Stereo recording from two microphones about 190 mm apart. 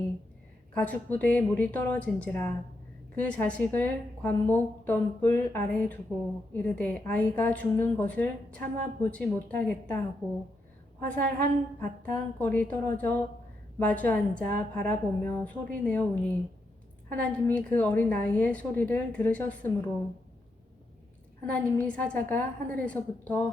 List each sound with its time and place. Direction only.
0.7 s a woman's voice: 5° left (ahead or behind)
11.0 s a woman's voice: 10° left (ahead or behind)
21.5 s a woman's voice: 5° left (ahead or behind)